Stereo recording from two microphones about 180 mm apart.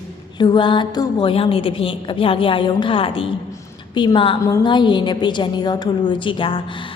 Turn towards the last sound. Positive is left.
turn(degrees=30)  # may be behind; listen again after turning